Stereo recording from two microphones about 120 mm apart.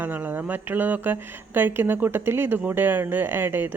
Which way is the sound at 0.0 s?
15° right (ahead or behind).